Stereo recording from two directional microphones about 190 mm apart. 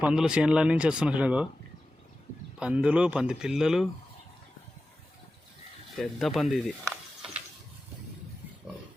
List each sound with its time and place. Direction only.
0.0 s speech: 5° right (ahead or behind)
2.6 s speech: 5° right (ahead or behind)
6.0 s speech: centre (ahead or behind)